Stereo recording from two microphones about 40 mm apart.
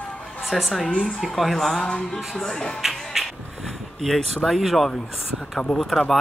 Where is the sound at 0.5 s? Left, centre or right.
Centre.